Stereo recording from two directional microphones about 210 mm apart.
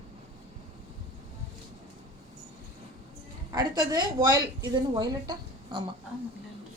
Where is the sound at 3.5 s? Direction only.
20° right (ahead or behind).